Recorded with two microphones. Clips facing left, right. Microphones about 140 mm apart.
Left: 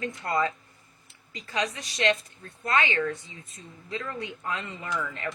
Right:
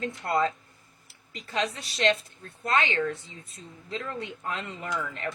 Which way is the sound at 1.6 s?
30° right (ahead or behind).